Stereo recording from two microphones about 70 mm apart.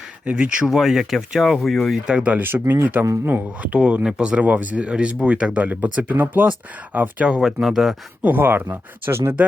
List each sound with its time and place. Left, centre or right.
0.3 s speech: centre
0.7 s speech: centre
2.0 s speech: centre
2.4 s speech: right
7.3 s speech: centre
8.2 s speech: right